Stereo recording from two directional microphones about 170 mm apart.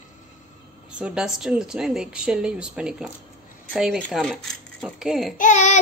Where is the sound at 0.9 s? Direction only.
5° right (ahead or behind).